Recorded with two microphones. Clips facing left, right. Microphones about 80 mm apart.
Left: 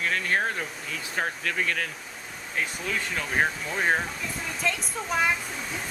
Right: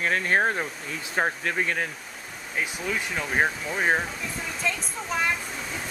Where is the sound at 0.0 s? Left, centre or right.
Right.